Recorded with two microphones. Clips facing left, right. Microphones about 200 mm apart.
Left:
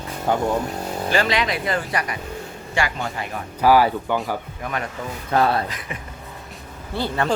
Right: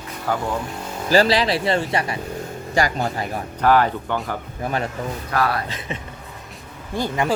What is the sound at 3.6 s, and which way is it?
Speech, 10° left (ahead or behind).